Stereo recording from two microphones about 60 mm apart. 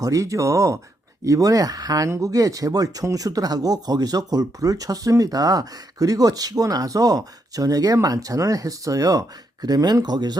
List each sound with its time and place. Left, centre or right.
0.0 s speech: right
1.2 s speech: right
2.0 s speech: right
9.6 s speech: right